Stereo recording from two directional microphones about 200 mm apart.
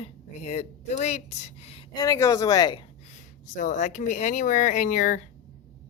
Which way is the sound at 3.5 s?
35° left (ahead or behind).